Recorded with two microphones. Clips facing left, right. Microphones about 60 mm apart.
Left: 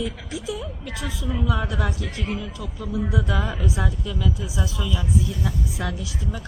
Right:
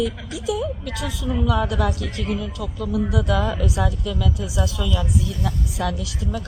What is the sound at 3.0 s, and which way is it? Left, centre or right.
Speech, left.